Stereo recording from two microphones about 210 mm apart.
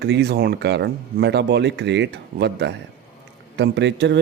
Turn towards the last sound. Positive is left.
turn(degrees=-55)  # may be behind; listen again after turning